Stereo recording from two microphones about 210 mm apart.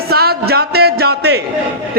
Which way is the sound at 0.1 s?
50° right (ahead or behind).